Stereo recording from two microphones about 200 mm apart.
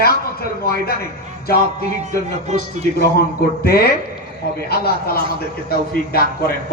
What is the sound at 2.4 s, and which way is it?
Speech, 35° right (ahead or behind).